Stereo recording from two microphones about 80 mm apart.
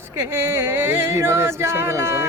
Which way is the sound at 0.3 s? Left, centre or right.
Right.